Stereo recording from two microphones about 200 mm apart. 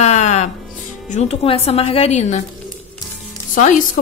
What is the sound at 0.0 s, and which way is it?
Music, 35° left (ahead or behind).